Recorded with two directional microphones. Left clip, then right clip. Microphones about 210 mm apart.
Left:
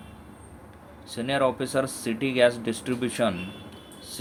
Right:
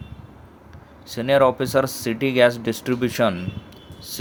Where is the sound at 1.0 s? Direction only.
25° right (ahead or behind).